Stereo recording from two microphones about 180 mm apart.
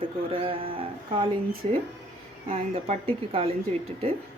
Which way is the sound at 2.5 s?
30° right (ahead or behind).